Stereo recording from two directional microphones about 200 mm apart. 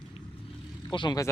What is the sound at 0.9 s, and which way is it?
Speech, 20° left (ahead or behind).